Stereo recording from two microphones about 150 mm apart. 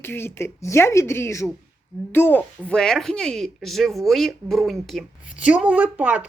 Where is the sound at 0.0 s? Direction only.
15° left (ahead or behind).